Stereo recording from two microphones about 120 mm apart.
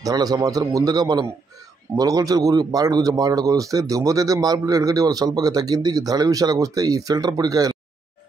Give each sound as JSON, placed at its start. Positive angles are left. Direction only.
{"t": 0.0, "sound": "speech", "side_deg": -30}